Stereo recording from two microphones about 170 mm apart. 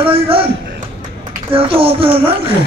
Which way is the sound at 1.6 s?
35° right (ahead or behind).